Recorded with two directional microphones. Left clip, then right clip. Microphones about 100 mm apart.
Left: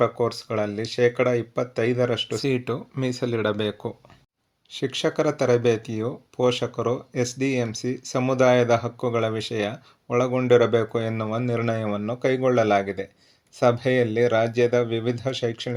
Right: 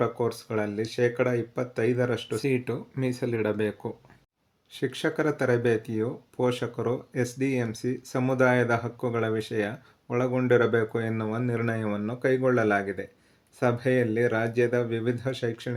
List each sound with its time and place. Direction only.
0.0 s speech: 20° left (ahead or behind)